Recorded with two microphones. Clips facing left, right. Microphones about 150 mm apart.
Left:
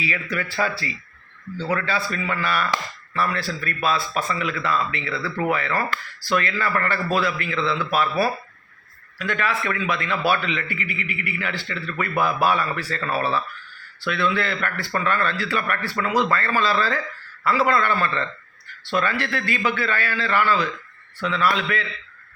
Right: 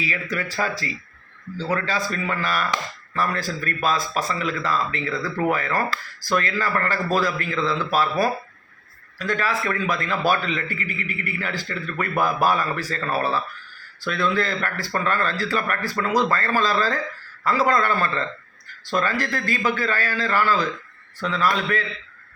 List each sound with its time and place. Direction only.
0.0 s speech: 40° right (ahead or behind)
1.7 s speech: 40° right (ahead or behind)
9.1 s speech: 35° right (ahead or behind)